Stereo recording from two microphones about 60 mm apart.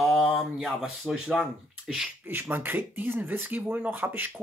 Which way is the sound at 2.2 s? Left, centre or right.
Right.